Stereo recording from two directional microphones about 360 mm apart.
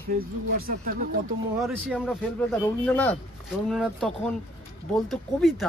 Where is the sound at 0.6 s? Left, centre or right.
Right.